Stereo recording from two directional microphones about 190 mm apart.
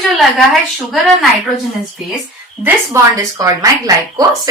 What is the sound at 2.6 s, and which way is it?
Speech, 15° right (ahead or behind).